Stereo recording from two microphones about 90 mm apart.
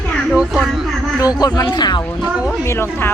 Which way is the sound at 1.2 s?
45° left (ahead or behind).